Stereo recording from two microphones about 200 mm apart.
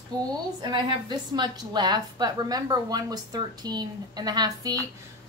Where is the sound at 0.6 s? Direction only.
20° right (ahead or behind).